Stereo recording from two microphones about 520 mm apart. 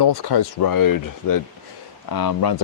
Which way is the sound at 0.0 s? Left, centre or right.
Left.